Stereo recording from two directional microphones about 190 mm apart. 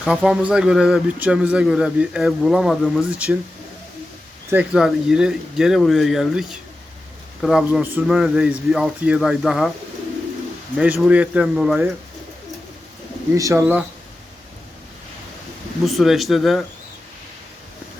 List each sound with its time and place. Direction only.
0.0 s speech: 5° right (ahead or behind)
4.5 s speech: 5° right (ahead or behind)
10.8 s speech: 5° right (ahead or behind)
13.3 s speech: 15° right (ahead or behind)
15.8 s speech: centre (ahead or behind)